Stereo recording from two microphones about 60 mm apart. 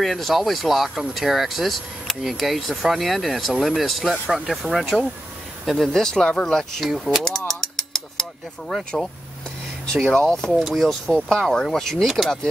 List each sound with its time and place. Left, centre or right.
0.0 s speech: centre
6.8 s speech: centre
7.2 s a sound: centre
10.0 s speech: centre
10.5 s speech: centre